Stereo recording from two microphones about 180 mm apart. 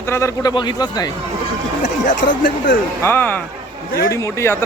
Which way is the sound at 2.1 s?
55° left (ahead or behind).